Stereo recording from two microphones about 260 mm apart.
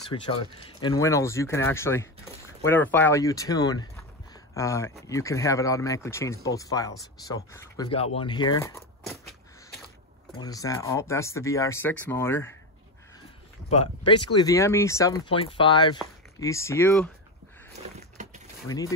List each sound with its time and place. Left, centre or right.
0.1 s speech: left
10.4 s speech: centre
13.7 s speech: left
18.2 s mechanisms: right
18.7 s speech: centre